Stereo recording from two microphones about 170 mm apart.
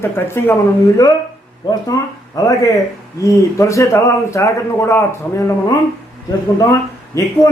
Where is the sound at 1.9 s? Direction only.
20° left (ahead or behind).